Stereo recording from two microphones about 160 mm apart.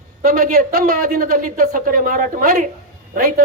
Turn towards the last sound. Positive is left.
turn(degrees=-60)  # may be behind; listen again after turning